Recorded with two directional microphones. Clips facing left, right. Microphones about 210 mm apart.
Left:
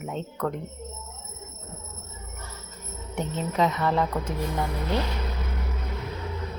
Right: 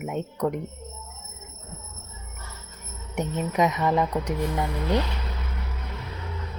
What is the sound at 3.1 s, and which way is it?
Speech, 15° right (ahead or behind).